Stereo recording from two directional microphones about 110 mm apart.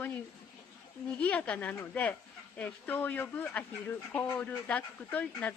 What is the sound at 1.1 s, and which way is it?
Speech, 10° left (ahead or behind).